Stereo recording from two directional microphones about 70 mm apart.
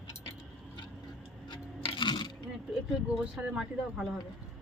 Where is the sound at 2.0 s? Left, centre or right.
Left.